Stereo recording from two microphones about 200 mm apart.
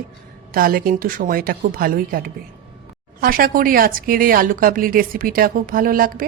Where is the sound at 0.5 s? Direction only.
45° right (ahead or behind).